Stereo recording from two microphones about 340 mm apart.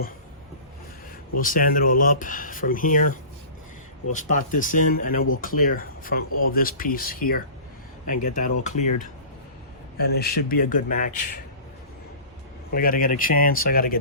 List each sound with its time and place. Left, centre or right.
1.4 s speech: left
12.7 s speech: left